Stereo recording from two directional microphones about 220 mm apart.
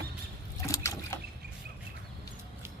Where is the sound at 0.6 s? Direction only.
15° left (ahead or behind).